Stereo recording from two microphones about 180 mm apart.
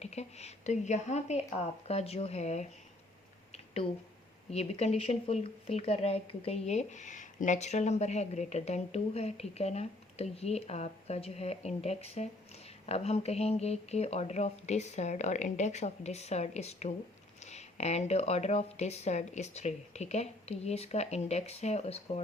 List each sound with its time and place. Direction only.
0.0 s speech: 35° left (ahead or behind)
4.5 s speech: 35° left (ahead or behind)